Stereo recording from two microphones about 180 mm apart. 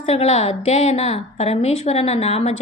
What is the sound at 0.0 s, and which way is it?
A woman's voice, 35° left (ahead or behind).